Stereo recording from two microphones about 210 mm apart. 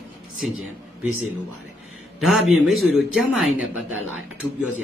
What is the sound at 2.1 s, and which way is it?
Speech, centre (ahead or behind).